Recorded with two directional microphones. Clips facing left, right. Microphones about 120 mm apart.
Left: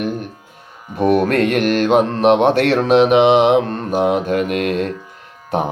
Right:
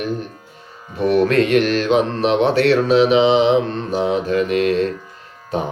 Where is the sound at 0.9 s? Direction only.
50° left (ahead or behind).